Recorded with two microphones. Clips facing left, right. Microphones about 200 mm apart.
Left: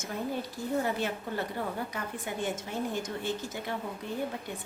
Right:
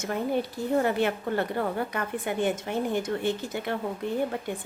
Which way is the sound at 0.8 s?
65° right (ahead or behind).